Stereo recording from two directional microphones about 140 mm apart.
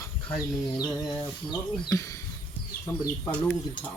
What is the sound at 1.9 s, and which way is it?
Speech, 25° left (ahead or behind).